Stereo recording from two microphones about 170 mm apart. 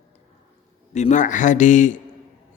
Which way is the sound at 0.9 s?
45° left (ahead or behind).